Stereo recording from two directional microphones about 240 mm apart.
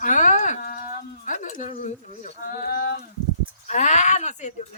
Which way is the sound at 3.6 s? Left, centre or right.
Left.